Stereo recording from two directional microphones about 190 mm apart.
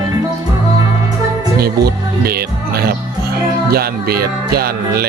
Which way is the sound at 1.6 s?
55° right (ahead or behind).